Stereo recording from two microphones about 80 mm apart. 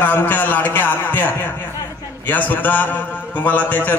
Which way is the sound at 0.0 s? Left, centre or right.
Left.